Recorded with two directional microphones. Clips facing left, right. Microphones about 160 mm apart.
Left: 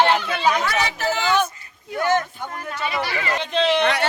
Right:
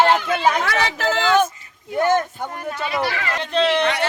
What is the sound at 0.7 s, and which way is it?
Speech, 90° right.